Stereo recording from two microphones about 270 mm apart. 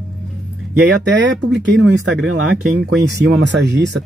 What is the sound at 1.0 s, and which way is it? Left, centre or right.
Speech, right.